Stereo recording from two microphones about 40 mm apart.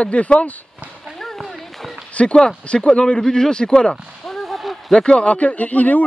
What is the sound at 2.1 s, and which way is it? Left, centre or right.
Speech, left.